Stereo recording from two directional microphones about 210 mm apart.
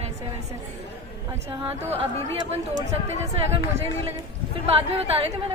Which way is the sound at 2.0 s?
25° right (ahead or behind).